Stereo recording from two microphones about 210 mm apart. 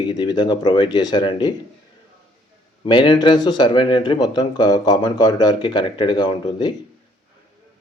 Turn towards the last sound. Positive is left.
turn(degrees=20)  # may be behind; listen again after turning